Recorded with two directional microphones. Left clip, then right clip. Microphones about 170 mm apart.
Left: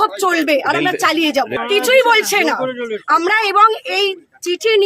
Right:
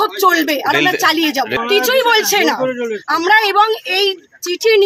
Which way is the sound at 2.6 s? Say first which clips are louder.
Right 3 dB; 40° right (ahead or behind).